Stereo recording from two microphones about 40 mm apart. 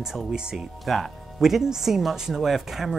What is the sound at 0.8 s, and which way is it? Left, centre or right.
Speech, centre.